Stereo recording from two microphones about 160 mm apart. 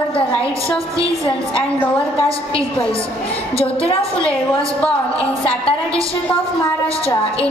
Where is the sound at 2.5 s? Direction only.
35° left (ahead or behind).